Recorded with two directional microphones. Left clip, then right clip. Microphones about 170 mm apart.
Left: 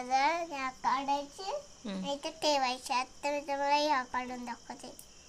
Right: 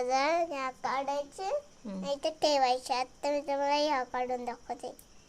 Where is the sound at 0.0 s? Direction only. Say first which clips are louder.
Right 2 dB; 70° right (ahead or behind).